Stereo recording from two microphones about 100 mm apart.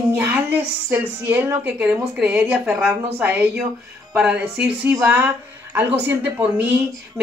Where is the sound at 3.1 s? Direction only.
15° right (ahead or behind).